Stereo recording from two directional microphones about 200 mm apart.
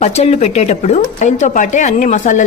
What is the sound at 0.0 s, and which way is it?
Speech, 30° left (ahead or behind).